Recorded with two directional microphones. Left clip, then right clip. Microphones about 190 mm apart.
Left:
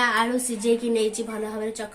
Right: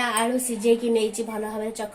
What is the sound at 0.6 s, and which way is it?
Speech, 10° left (ahead or behind).